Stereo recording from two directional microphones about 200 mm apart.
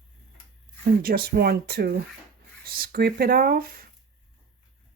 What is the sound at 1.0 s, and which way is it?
Speech, 50° right (ahead or behind).